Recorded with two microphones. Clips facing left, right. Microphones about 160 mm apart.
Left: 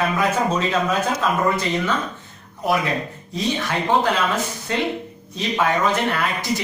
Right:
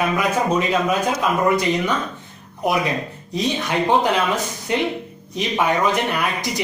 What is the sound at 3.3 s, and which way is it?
Speech, 15° right (ahead or behind).